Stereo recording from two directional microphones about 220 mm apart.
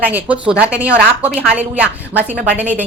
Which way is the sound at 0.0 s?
5° right (ahead or behind).